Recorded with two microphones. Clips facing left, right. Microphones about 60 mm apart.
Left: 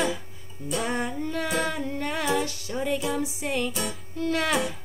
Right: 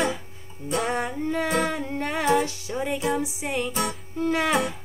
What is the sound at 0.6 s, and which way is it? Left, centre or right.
Music, right.